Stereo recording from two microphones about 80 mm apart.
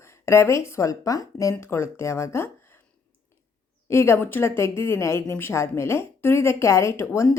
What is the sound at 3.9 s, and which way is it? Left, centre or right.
Speech, left.